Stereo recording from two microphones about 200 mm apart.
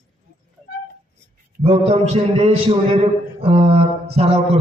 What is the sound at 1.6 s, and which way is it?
A man's voice, 30° right (ahead or behind).